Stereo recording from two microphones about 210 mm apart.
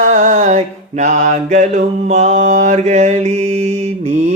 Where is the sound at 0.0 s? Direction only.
35° right (ahead or behind).